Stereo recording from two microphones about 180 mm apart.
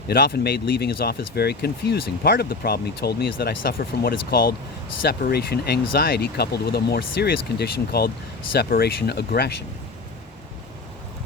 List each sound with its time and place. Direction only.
0.1 s speech: 55° left (ahead or behind)